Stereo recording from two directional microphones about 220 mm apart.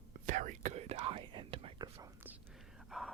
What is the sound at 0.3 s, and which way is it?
Whispering, 35° right (ahead or behind).